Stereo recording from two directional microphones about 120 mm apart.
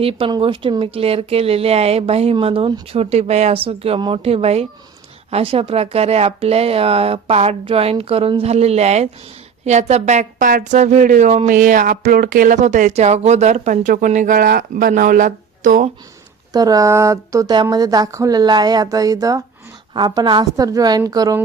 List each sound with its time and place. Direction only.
0.0 s speech: 55° right (ahead or behind)
0.3 s speech: 40° right (ahead or behind); by 15.9 s 90° right
16.5 s speech: 30° right (ahead or behind)
17.5 s speech: 35° right (ahead or behind)